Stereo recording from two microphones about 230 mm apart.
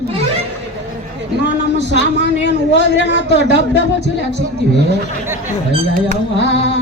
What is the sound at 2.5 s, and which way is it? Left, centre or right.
Speech, right.